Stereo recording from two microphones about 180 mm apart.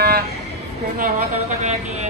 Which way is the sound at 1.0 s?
50° right (ahead or behind).